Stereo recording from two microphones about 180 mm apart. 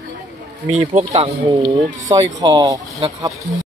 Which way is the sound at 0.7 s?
35° right (ahead or behind).